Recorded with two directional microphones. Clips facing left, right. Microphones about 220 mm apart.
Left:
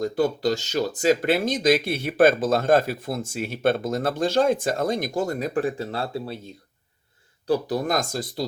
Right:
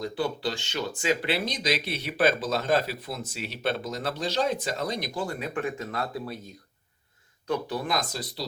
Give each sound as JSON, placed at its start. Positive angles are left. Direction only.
{"t": 0.0, "sound": "speech", "side_deg": 40}